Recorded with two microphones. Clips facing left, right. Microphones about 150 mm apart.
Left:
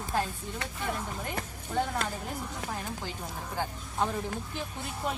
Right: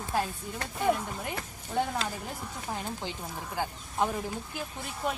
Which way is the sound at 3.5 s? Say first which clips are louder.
Right 1 dB; 10° right (ahead or behind).